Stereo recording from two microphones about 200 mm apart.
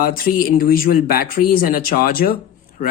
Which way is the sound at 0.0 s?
45° left (ahead or behind).